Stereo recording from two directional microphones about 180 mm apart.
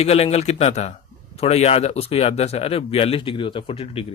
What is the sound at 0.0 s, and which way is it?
Speech, 35° left (ahead or behind).